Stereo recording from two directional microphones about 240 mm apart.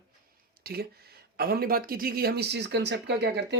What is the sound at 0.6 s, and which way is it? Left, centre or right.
Speech, right.